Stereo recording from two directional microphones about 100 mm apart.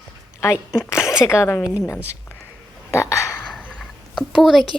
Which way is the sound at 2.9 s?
25° left (ahead or behind).